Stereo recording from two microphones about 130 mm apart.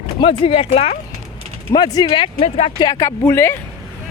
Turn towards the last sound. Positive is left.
turn(degrees=15)  # may be behind; listen again after turning